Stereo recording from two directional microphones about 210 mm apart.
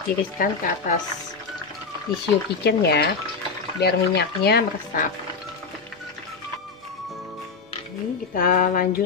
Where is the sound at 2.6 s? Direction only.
50° left (ahead or behind).